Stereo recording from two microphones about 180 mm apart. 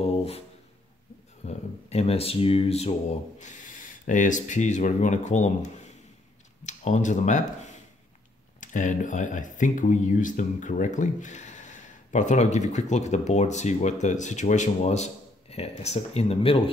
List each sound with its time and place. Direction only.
0.0 s a sound: 35° left (ahead or behind)
1.4 s speech: 35° left (ahead or behind)
6.6 s speech: 40° left (ahead or behind)